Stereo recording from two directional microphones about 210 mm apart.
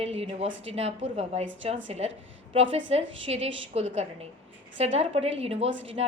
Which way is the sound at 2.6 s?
65° right (ahead or behind).